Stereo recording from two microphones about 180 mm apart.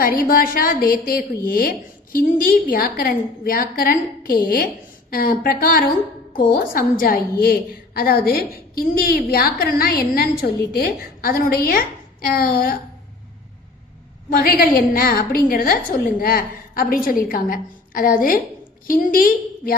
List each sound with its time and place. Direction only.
0.0 s a woman's voice: 55° left (ahead or behind)
14.3 s a woman's voice: 55° left (ahead or behind)